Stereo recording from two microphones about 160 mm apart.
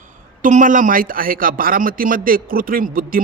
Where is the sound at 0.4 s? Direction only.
55° right (ahead or behind).